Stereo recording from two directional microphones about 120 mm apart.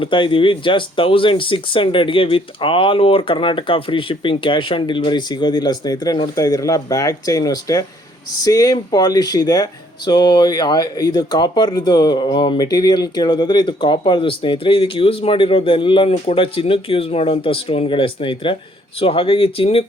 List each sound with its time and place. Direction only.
0.0 s speech: 45° left (ahead or behind)
16.0 s speech: 55° left (ahead or behind)